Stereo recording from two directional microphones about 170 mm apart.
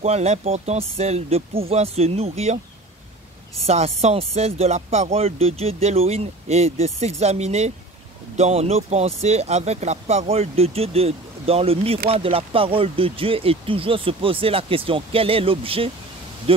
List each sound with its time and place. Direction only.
0.0 s speech: 40° right (ahead or behind)
3.6 s speech: 40° right (ahead or behind)